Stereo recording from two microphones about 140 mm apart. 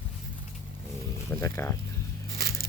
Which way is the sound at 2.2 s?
90° right.